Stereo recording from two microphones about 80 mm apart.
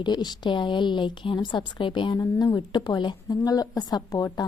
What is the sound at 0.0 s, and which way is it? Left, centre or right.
A woman's voice, left.